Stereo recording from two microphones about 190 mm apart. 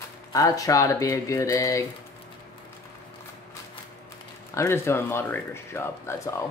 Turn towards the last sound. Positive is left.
turn(degrees=15)  # may be behind; listen again after turning